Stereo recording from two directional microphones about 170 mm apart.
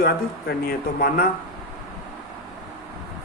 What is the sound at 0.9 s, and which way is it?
Speech, 60° left (ahead or behind).